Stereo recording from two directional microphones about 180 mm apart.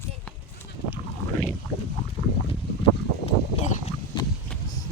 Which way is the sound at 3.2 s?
40° left (ahead or behind).